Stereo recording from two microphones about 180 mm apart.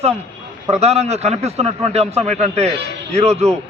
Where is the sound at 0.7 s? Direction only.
35° right (ahead or behind).